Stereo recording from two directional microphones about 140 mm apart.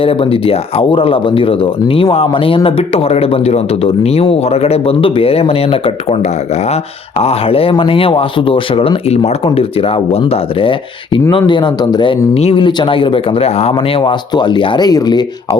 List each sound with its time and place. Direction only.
0.0 s speech: 40° left (ahead or behind)
12.3 s speech: 45° left (ahead or behind); by 15.2 s 30° left (ahead or behind)